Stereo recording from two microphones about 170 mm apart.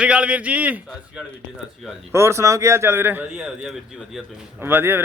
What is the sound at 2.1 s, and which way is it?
Speech, 15° right (ahead or behind).